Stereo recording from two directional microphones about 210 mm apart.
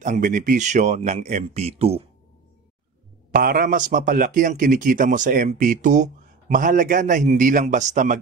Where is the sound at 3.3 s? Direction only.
45° right (ahead or behind).